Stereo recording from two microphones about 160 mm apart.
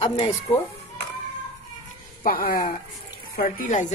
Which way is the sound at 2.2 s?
65° left (ahead or behind).